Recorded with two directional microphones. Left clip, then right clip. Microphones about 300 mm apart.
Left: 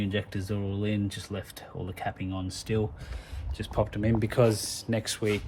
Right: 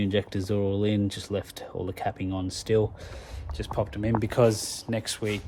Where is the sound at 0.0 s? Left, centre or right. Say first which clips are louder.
Right 5 dB; right.